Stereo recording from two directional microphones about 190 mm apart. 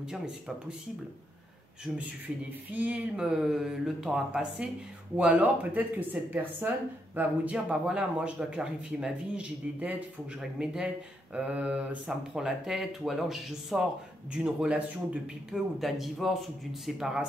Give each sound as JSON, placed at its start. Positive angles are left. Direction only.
{"t": 0.0, "sound": "a man's voice", "side_deg": -5}
{"t": 1.9, "sound": "a man's voice", "side_deg": -5}